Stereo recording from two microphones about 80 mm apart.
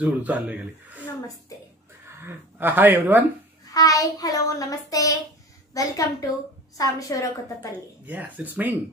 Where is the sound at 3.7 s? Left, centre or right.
Left.